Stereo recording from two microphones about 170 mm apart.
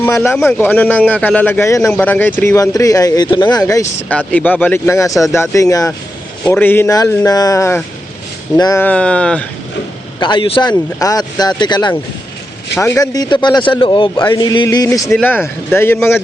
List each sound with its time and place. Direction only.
0.4 s speech: 10° left (ahead or behind)
4.3 s speech: 10° left (ahead or behind)
8.8 s speech: 5° left (ahead or behind)
10.2 s speech: 30° left (ahead or behind); by 16.0 s 15° left (ahead or behind)